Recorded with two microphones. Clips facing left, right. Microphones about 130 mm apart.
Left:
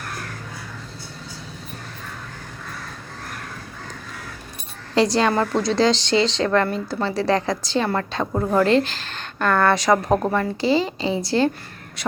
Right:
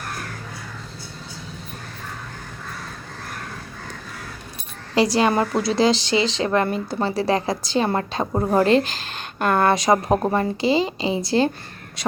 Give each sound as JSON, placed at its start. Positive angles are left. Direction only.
{"t": 4.9, "sound": "a woman's voice", "side_deg": -5}